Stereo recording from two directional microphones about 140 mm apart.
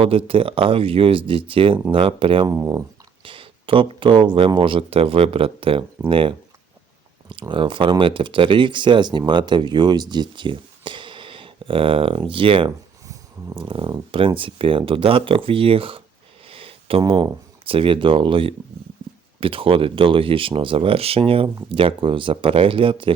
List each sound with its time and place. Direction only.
0.0 s speech: 40° right (ahead or behind)
2.5 s speech: 25° right (ahead or behind)
3.2 s speech: 40° right (ahead or behind)
16.5 s a sound: 40° right (ahead or behind)
17.1 s speech: 35° right (ahead or behind)